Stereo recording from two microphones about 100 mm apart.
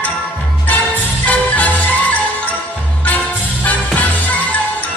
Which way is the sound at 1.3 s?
15° left (ahead or behind).